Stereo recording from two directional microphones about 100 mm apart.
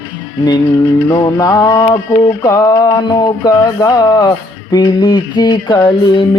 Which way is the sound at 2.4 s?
35° left (ahead or behind).